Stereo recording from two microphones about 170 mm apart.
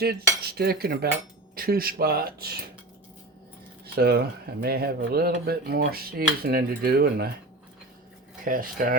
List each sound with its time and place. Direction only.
0.5 s speech: 70° right (ahead or behind)
3.9 s speech: 70° right (ahead or behind)
8.4 s speech: 55° right (ahead or behind)